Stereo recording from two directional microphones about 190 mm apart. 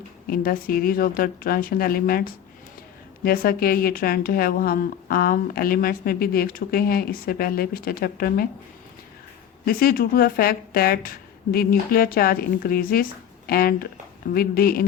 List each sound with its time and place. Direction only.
0.3 s a woman's voice: 50° left (ahead or behind)
3.2 s a woman's voice: 50° left (ahead or behind)
9.6 s a woman's voice: 50° left (ahead or behind)